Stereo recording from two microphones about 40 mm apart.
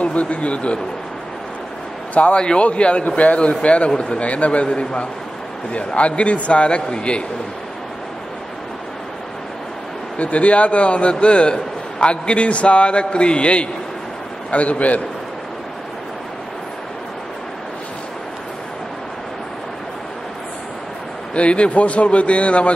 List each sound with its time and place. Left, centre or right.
0.0 s speech: left
2.1 s a man's voice: left
10.1 s a man's voice: left
21.4 s a man's voice: left